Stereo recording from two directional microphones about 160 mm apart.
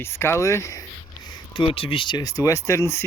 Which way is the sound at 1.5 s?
35° left (ahead or behind).